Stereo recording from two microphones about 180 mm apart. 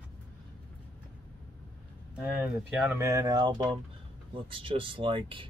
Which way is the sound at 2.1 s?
10° right (ahead or behind).